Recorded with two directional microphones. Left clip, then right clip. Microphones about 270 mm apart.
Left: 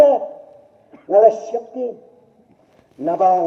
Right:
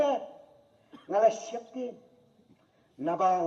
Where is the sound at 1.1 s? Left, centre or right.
Right.